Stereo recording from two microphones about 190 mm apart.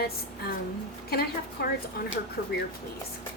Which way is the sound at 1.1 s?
55° left (ahead or behind).